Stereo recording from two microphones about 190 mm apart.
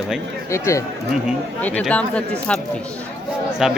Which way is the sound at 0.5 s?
15° left (ahead or behind).